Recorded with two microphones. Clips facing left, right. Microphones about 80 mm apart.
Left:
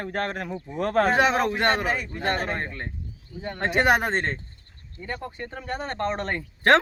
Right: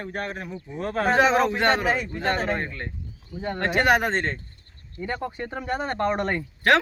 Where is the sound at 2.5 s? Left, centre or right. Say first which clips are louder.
Right 1 dB; centre.